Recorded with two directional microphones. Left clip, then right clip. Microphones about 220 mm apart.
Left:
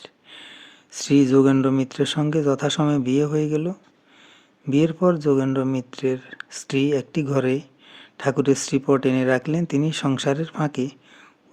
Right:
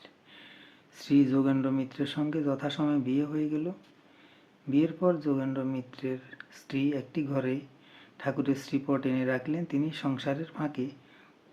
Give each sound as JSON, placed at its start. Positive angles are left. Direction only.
{"t": 0.0, "sound": "speech", "side_deg": 50}